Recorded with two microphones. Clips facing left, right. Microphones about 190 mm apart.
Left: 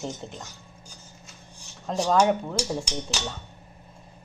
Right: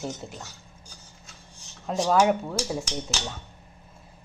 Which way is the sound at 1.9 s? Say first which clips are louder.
Even; 5° right (ahead or behind).